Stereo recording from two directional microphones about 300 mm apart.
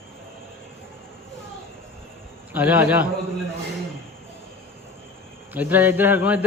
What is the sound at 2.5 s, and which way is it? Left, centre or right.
Speech, centre.